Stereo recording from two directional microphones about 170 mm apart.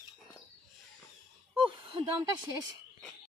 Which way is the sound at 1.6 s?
30° right (ahead or behind).